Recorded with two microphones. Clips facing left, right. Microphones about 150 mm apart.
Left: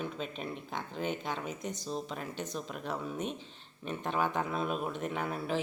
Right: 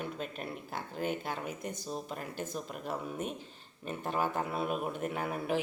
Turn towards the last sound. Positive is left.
turn(degrees=-10)  # may be behind; listen again after turning